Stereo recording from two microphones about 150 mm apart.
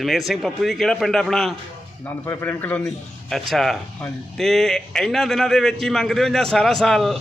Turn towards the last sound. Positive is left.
turn(degrees=0)  # may be behind; listen again after turning